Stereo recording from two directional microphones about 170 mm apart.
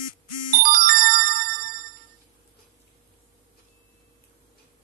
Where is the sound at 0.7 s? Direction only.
60° right (ahead or behind).